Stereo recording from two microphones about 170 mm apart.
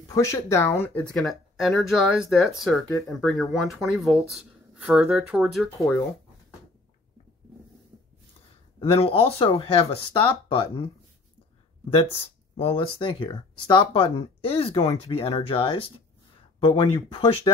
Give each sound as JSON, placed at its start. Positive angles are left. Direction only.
{"t": 0.1, "sound": "speech", "side_deg": 15}
{"t": 8.7, "sound": "speech", "side_deg": 35}
{"t": 12.5, "sound": "speech", "side_deg": 35}